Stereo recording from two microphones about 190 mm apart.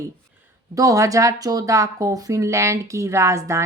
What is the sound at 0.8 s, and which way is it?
Speech, 15° right (ahead or behind).